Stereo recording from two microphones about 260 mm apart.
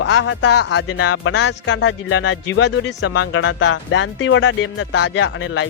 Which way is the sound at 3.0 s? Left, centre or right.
Left.